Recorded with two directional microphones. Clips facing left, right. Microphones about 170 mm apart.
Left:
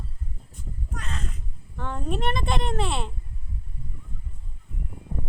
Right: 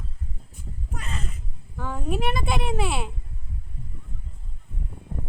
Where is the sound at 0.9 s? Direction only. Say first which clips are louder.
Right 1 dB; 5° right (ahead or behind).